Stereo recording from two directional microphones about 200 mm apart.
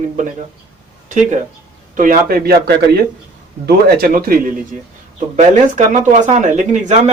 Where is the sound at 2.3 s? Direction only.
50° right (ahead or behind).